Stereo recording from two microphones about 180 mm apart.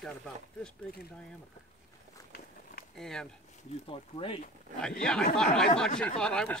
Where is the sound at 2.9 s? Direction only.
5° left (ahead or behind).